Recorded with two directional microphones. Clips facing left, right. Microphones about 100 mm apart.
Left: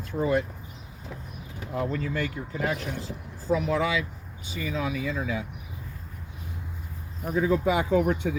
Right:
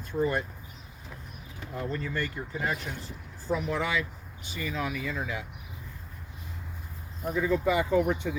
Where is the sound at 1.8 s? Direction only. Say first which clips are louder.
Left 4 dB; 90° left.